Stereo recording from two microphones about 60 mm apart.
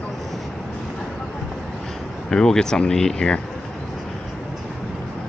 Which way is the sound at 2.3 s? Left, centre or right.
Centre.